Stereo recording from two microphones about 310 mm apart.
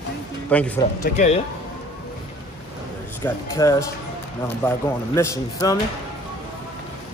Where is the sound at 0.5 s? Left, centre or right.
Centre.